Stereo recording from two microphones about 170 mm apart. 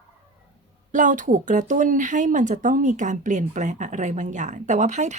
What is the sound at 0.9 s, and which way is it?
Speech, 50° right (ahead or behind).